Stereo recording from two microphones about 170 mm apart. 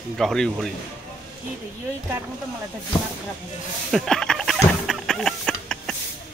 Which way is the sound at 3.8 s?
Centre (ahead or behind).